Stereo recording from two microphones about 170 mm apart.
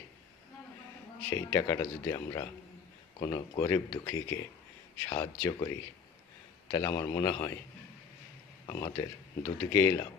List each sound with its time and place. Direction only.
1.3 s speech: 15° left (ahead or behind)
8.6 s speech: 20° left (ahead or behind)